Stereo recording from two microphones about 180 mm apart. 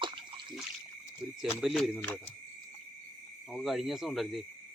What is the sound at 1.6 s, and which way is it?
Speech, centre (ahead or behind).